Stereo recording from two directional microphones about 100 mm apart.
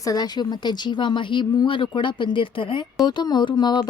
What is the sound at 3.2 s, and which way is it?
Speech, 50° left (ahead or behind).